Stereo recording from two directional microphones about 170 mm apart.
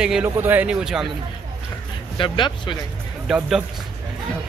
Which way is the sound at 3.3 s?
Centre (ahead or behind).